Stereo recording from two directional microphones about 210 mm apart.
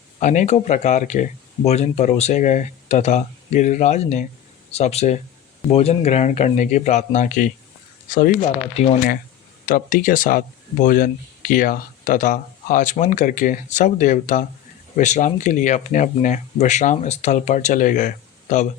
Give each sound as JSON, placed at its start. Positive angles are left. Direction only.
{"t": 0.2, "sound": "speech", "side_deg": 35}